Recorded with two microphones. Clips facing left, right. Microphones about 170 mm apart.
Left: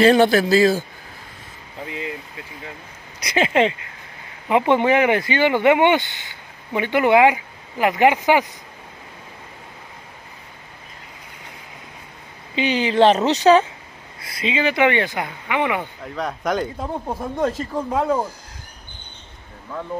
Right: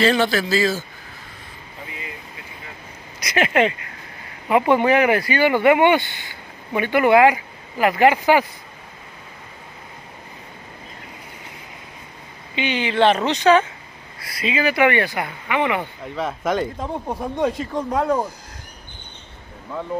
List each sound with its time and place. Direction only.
0.1 s a man's voice: 45° left (ahead or behind)
3.3 s speech: 25° left (ahead or behind)
12.5 s speech: 35° left (ahead or behind)
14.2 s speech: 25° left (ahead or behind)
16.2 s speech: centre (ahead or behind)